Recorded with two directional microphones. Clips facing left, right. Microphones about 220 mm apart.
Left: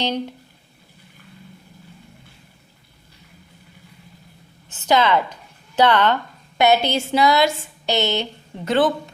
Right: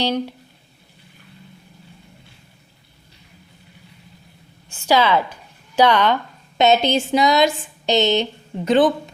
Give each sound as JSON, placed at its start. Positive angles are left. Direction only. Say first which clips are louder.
{"t": 4.9, "sound": "speech", "louder": "right 1 dB", "side_deg": -10}